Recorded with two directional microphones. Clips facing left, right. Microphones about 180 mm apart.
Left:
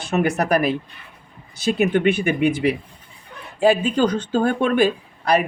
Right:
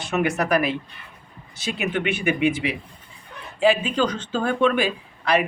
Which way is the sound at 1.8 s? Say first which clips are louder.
Left 5 dB; 40° left (ahead or behind).